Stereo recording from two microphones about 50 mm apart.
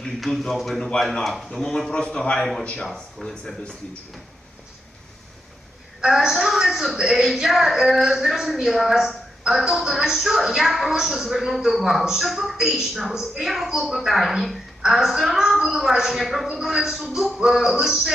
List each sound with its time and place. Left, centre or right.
0.2 s a woman's voice: centre
6.1 s a woman's voice: centre